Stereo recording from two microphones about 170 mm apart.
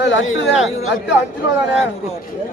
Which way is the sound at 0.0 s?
90° left.